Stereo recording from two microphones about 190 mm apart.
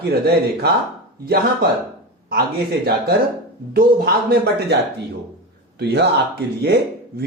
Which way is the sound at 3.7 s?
55° right (ahead or behind).